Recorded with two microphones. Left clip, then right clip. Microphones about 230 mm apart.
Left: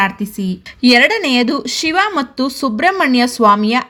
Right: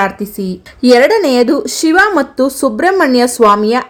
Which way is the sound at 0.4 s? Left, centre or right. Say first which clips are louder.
Right 3 dB; left.